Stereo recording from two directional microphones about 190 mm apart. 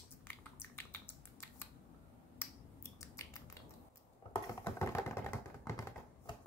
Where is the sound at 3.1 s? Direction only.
15° left (ahead or behind).